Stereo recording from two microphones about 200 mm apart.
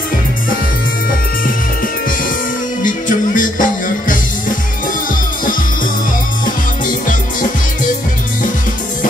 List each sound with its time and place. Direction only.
2.8 s music: 40° left (ahead or behind)